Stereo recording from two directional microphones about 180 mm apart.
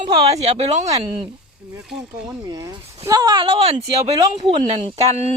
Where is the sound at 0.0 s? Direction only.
20° right (ahead or behind).